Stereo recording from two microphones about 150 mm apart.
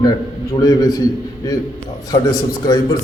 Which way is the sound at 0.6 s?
25° left (ahead or behind).